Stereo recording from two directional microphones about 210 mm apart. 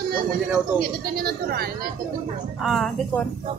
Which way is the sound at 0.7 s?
45° right (ahead or behind).